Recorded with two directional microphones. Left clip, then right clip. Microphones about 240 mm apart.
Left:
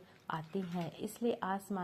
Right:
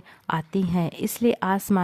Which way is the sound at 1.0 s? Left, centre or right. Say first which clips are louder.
Right 13 dB; right.